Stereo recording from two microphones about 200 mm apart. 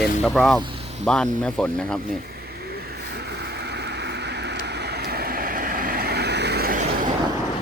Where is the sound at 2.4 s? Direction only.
55° right (ahead or behind).